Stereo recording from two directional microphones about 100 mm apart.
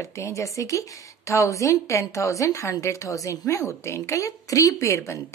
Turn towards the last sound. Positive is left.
turn(degrees=30)  # may be behind; listen again after turning